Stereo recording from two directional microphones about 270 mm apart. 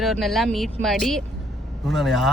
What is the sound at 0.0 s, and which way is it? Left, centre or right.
Speech, centre.